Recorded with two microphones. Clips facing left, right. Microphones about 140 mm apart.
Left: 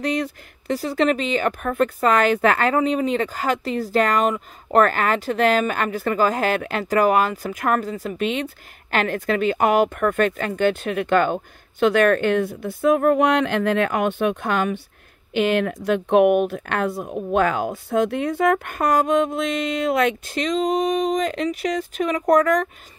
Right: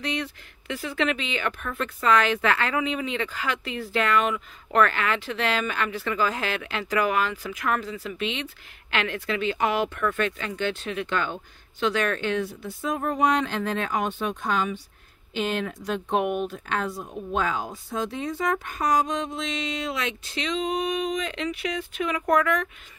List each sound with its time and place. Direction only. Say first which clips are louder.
0.0 s speech: left 7 dB; 45° left (ahead or behind)